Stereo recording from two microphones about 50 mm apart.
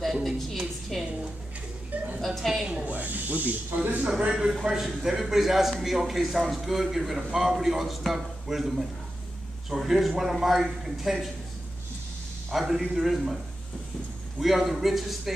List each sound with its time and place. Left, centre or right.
0.0 s a sound: centre
2.1 s a sound: centre
2.6 s snake: centre
2.9 s speech: right
4.3 s a man's voice: centre
12.4 s a man's voice: centre
14.4 s a man's voice: centre